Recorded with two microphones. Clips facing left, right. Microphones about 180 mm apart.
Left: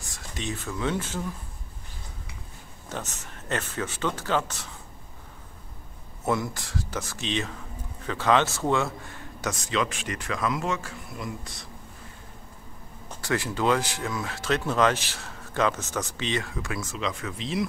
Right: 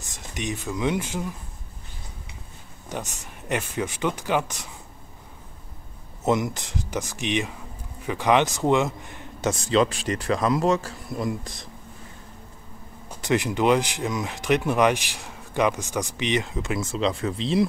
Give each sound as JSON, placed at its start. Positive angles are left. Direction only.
{"t": 0.0, "sound": "speech", "side_deg": -20}
{"t": 2.9, "sound": "speech", "side_deg": -15}
{"t": 6.2, "sound": "a man's voice", "side_deg": -20}
{"t": 13.1, "sound": "speech", "side_deg": -20}